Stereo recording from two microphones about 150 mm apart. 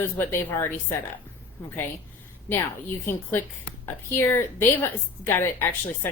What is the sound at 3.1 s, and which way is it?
A woman's voice, 15° left (ahead or behind).